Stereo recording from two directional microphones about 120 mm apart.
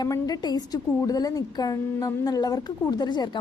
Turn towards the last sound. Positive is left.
turn(degrees=35)  # may be behind; listen again after turning